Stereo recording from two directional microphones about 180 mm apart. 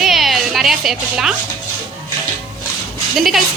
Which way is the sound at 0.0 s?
Centre (ahead or behind).